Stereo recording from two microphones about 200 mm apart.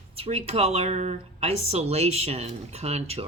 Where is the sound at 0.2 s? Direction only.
30° right (ahead or behind).